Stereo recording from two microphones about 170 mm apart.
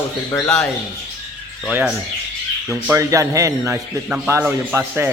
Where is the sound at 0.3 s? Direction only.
15° left (ahead or behind).